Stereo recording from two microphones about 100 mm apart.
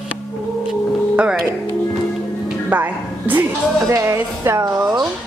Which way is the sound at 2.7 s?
20° right (ahead or behind).